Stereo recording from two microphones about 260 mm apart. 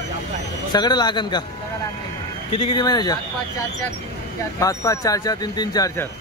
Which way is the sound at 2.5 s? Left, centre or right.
Centre.